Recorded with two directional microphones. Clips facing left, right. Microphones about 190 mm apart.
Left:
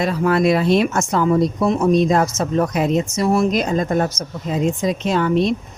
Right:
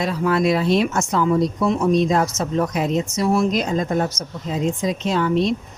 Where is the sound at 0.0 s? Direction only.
55° left (ahead or behind).